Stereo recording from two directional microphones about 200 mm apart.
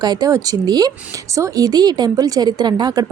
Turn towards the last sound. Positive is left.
turn(degrees=-20)  # may be behind; listen again after turning